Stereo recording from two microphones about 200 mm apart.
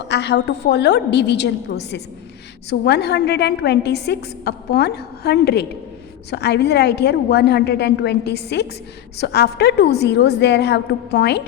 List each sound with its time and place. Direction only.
0.1 s a woman's voice: 60° left (ahead or behind)